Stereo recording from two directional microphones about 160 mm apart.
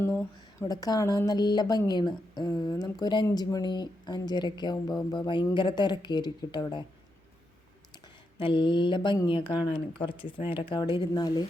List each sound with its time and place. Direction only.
0.0 s a sound: 10° left (ahead or behind)
0.6 s a woman's voice: 25° left (ahead or behind)
8.4 s mantra: 30° left (ahead or behind)
9.1 s speech: 30° left (ahead or behind)